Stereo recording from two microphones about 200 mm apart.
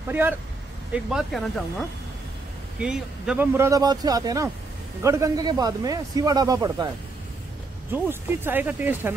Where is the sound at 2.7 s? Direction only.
5° right (ahead or behind); by 6.8 s 20° right (ahead or behind).